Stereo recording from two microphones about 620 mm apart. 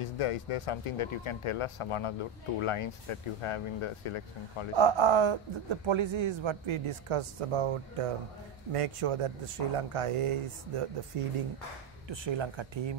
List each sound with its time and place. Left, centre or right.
0.0 s speech: left
4.7 s a man's voice: right
12.1 s speech: right